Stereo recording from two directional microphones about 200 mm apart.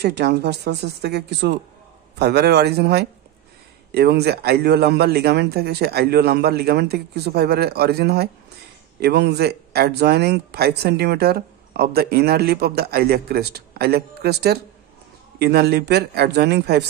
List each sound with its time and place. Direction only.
0.0 s speech: 55° right (ahead or behind)